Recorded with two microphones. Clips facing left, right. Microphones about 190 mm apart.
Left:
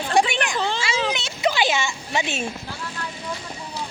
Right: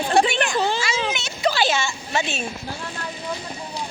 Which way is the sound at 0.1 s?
15° left (ahead or behind).